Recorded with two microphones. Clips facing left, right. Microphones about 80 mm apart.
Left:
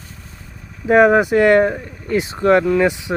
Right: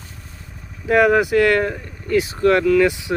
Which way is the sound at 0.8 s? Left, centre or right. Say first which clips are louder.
Left 3 dB; left.